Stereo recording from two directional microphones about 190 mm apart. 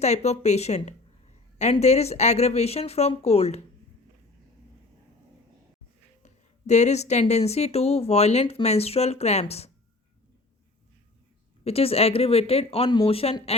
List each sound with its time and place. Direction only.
0.0 s speech: 35° left (ahead or behind)
6.2 s speech: 35° left (ahead or behind)
11.6 s speech: 30° left (ahead or behind)